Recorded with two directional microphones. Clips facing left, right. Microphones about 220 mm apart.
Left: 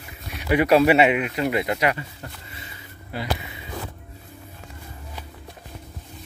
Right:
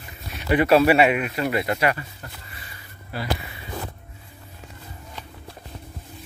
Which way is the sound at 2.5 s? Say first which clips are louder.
Left 3 dB; 20° left (ahead or behind).